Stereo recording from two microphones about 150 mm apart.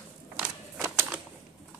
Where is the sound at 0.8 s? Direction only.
20° right (ahead or behind).